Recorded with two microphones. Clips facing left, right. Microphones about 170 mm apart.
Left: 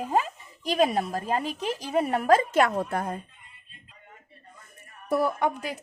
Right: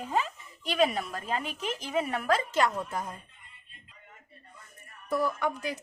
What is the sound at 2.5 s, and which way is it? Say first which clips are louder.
Speech: left 5 dB; 60° left (ahead or behind).